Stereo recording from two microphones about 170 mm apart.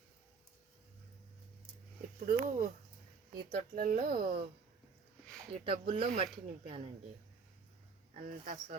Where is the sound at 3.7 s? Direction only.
55° right (ahead or behind).